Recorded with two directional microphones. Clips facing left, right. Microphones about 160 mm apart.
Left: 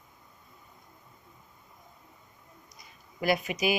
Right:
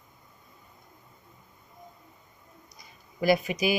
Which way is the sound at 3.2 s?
35° right (ahead or behind).